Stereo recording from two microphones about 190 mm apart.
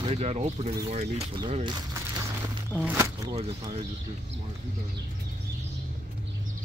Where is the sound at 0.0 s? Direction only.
35° right (ahead or behind).